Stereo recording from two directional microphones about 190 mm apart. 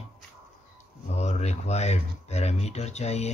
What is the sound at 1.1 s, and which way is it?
Speech, 35° left (ahead or behind).